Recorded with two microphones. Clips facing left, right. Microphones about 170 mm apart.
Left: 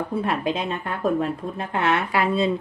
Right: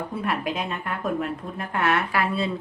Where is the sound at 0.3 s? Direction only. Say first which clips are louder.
Left 3 dB; 25° left (ahead or behind).